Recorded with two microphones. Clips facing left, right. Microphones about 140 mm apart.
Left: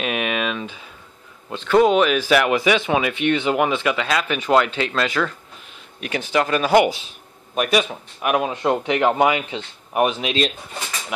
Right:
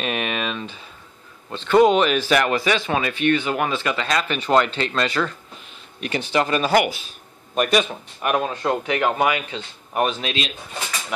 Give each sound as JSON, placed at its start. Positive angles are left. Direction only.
{"t": 0.0, "sound": "speech", "side_deg": 5}
{"t": 6.7, "sound": "speech", "side_deg": 25}
{"t": 7.5, "sound": "speech", "side_deg": 5}